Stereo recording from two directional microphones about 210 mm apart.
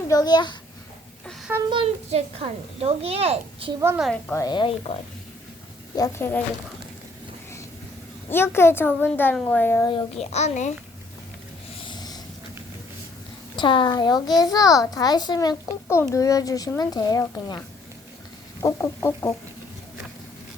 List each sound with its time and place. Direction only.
0.1 s a child's voice: 20° left (ahead or behind)
1.3 s a sound: centre (ahead or behind)
1.7 s speech: 30° right (ahead or behind)
3.8 s a woman's voice: 10° right (ahead or behind)
4.0 s a woman's voice: 5° left (ahead or behind)
4.4 s a child's voice: 20° left (ahead or behind)
6.0 s a woman's voice: 10° left (ahead or behind)
8.3 s a woman's voice: 10° left (ahead or behind)
10.3 s a child's voice: 35° left (ahead or behind)
11.9 s vehicle: 20° left (ahead or behind)
13.6 s a child's voice: 20° left (ahead or behind)
18.6 s a woman's voice: 10° left (ahead or behind)